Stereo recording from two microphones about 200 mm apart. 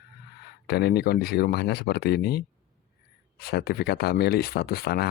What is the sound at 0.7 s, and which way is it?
Speech, 55° left (ahead or behind).